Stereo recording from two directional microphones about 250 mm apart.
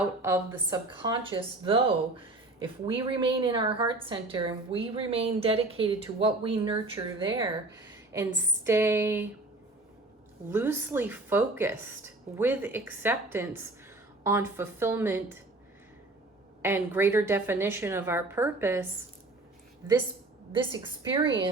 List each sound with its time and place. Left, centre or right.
0.0 s speech: centre
8.6 s a woman's voice: centre
10.5 s a woman's voice: centre
16.6 s a woman's voice: centre
20.5 s speech: centre